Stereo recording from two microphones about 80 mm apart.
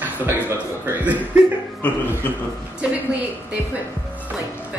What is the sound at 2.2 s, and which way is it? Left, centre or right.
Speech, left.